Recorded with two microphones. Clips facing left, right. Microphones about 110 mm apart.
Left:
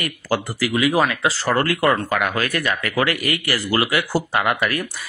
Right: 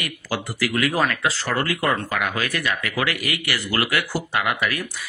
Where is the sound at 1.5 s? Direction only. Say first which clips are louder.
Left 5 dB; 55° left (ahead or behind); by 3.7 s 35° left (ahead or behind).